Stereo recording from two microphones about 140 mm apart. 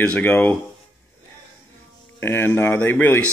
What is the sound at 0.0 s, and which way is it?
Speech, 10° left (ahead or behind).